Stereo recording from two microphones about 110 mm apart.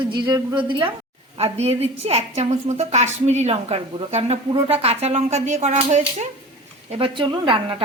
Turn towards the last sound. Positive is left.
turn(degrees=-55)  # may be behind; listen again after turning